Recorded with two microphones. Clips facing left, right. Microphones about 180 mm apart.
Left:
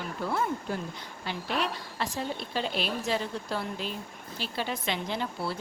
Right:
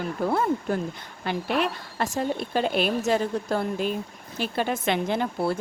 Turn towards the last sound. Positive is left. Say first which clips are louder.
# right 7 dB
turn(degrees=-50)  # may be behind; listen again after turning